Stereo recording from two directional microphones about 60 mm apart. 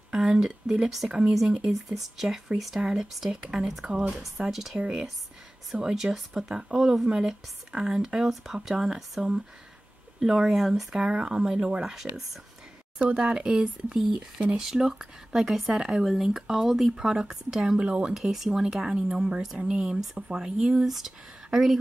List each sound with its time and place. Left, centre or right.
0.1 s speech: centre
4.7 s speech: centre
13.0 s speech: right; by 21.7 s centre